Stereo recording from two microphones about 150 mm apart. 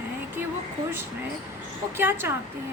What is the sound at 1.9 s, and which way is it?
Speech, 15° right (ahead or behind).